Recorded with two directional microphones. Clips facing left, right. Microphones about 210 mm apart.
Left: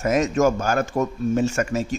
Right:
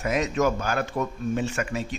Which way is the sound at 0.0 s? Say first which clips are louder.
Left 5 dB; 45° left (ahead or behind).